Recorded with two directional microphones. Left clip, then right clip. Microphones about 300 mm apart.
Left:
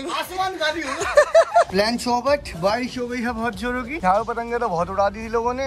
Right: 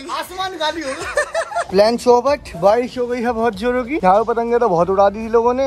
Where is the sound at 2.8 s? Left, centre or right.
Centre.